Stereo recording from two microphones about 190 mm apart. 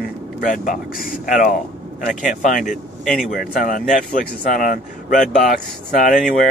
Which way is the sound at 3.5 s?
45° left (ahead or behind).